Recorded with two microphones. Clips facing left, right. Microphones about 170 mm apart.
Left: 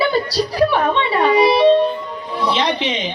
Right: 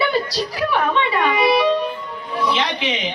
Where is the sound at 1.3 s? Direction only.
30° left (ahead or behind).